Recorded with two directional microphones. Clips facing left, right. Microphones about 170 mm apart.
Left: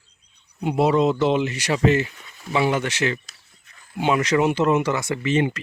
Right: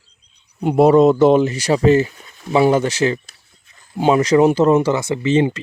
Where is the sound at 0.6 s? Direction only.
50° right (ahead or behind).